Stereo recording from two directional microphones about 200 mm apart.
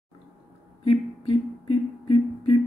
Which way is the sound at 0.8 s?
25° left (ahead or behind).